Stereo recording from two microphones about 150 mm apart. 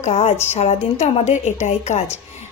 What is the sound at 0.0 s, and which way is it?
A woman's voice, 45° left (ahead or behind).